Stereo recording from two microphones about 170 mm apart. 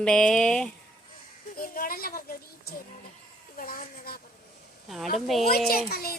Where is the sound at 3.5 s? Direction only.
55° left (ahead or behind).